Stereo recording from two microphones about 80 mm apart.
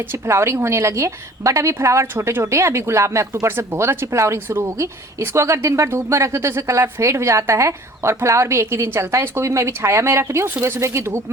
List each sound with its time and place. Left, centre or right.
0.1 s a woman's voice: right